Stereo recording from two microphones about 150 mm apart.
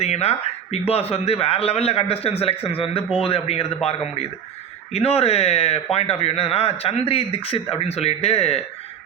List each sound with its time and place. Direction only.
0.0 s speech: 45° left (ahead or behind)